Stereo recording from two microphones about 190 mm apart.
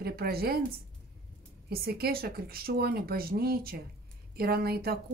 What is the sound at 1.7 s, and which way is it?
Speech, 55° right (ahead or behind).